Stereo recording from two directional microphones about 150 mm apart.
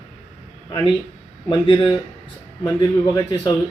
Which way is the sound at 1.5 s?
35° left (ahead or behind).